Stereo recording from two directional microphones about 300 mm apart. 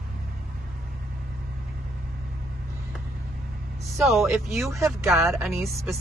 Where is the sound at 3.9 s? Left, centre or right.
Centre.